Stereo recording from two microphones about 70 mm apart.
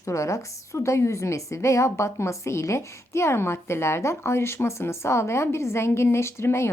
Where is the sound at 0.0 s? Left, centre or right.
Left.